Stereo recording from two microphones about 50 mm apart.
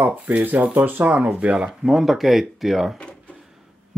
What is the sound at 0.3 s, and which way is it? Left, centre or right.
Speech, right.